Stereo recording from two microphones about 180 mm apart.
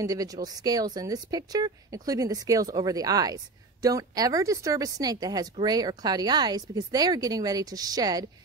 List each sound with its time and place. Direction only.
0.0 s speech: 20° right (ahead or behind)